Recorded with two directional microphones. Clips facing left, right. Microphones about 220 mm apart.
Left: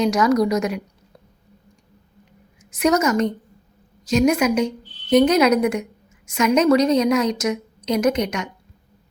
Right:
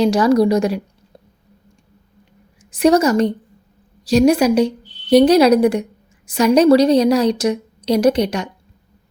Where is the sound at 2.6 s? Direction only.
30° right (ahead or behind).